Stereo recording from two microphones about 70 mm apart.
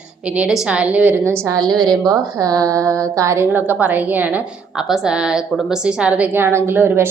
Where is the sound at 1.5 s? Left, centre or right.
Right.